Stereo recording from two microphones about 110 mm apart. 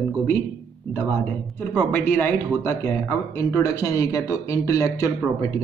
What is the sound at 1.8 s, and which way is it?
Speech, 15° left (ahead or behind).